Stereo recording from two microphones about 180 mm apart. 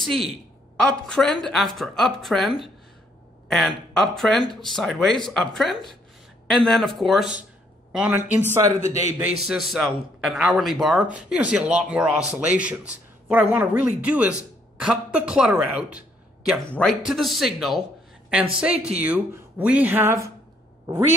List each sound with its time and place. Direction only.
0.0 s a woman's voice: centre (ahead or behind)
8.8 s a man's voice: 35° left (ahead or behind)
9.2 s a man's voice: 5° right (ahead or behind)